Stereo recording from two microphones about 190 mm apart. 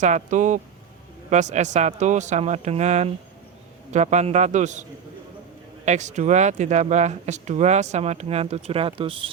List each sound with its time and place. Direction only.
0.0 s speech: 40° right (ahead or behind)